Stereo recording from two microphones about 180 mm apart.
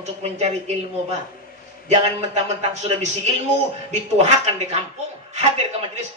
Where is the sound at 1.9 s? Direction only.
40° right (ahead or behind).